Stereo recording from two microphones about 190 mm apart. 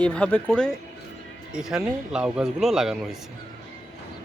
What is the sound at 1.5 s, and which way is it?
Speech, 5° right (ahead or behind).